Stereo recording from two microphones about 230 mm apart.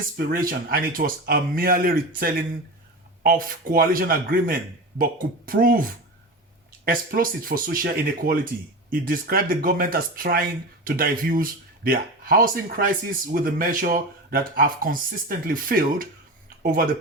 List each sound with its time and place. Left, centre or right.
0.3 s speech: right
6.8 s speech: right